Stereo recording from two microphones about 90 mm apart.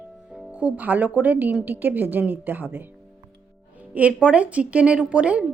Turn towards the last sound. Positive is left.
turn(degrees=-15)  # may be behind; listen again after turning